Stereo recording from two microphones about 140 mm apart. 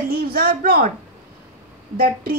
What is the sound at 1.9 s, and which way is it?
Speech, 90° right.